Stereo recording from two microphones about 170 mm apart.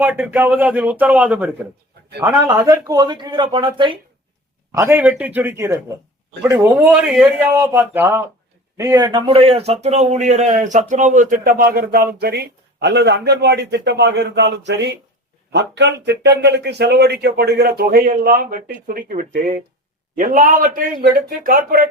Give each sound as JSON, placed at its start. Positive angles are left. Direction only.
{"t": 0.0, "sound": "speech", "side_deg": -10}
{"t": 2.5, "sound": "speech", "side_deg": -20}
{"t": 4.7, "sound": "speech", "side_deg": -15}
{"t": 6.8, "sound": "speech", "side_deg": -5}
{"t": 7.5, "sound": "a man's voice", "side_deg": -15}